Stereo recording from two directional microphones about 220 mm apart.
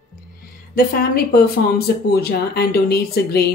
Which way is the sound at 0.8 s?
45° left (ahead or behind).